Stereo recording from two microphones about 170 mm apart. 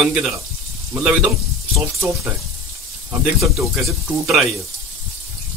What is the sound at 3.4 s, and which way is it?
Speech, centre (ahead or behind).